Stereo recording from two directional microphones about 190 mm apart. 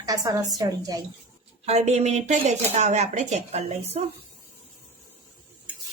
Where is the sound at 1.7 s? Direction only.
35° right (ahead or behind).